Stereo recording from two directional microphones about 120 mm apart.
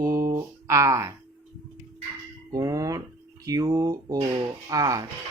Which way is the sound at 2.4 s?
30° right (ahead or behind).